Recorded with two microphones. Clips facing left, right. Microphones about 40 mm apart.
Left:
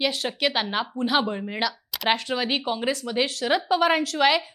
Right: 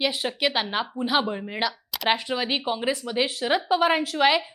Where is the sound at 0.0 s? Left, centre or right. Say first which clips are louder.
Even; centre.